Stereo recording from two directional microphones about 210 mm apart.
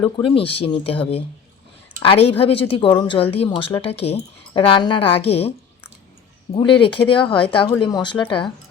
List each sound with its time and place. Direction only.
0.2 s a woman's voice: 25° left (ahead or behind)
2.0 s a woman's voice: 25° left (ahead or behind)